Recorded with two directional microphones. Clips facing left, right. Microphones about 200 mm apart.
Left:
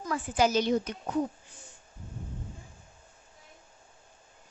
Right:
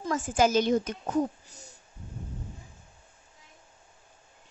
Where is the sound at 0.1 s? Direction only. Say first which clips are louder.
Right 2 dB; 45° right (ahead or behind).